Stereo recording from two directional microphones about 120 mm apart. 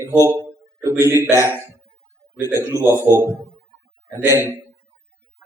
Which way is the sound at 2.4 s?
20° right (ahead or behind).